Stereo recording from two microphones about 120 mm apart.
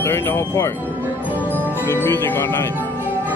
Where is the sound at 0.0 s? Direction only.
20° left (ahead or behind).